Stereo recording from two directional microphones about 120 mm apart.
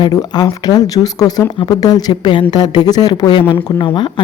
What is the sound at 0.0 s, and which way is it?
A woman's voice, 35° left (ahead or behind).